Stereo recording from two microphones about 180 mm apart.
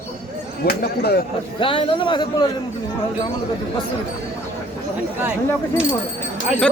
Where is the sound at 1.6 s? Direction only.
30° left (ahead or behind).